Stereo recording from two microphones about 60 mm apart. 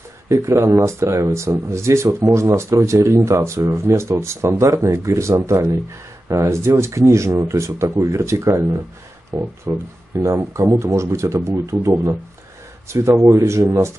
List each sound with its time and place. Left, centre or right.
0.3 s speech: right
9.3 s speech: right
9.7 s speech: right